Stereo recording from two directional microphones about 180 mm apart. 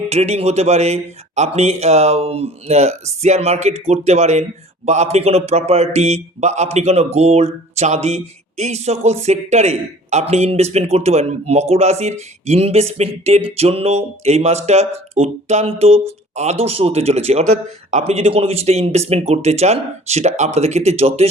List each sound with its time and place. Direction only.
0.1 s a man's voice: 35° right (ahead or behind)